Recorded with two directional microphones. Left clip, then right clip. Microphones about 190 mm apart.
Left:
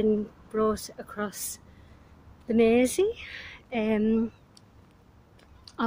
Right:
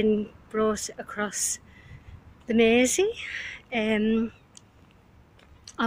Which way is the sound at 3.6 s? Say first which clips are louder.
Right 1 dB; 5° left (ahead or behind).